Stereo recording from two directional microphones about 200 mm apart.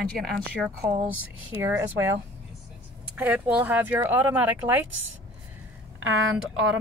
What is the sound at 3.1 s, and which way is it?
Speech, 5° right (ahead or behind).